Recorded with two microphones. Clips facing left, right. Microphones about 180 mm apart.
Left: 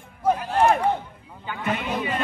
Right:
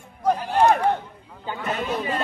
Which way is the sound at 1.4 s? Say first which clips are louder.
Even; 35° right (ahead or behind).